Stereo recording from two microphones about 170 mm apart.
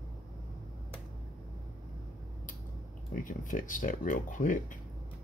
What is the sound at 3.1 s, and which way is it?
Speech, 50° left (ahead or behind).